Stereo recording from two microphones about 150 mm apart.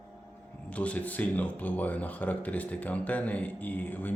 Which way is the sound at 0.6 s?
10° left (ahead or behind).